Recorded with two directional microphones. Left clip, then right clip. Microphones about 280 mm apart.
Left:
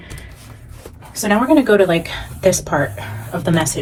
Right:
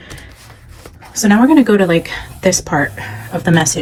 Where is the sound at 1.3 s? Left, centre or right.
Right.